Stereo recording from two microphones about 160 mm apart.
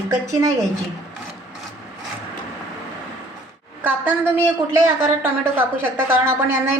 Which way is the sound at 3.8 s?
15° right (ahead or behind).